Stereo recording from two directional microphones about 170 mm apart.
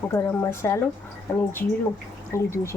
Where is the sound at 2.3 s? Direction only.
15° left (ahead or behind).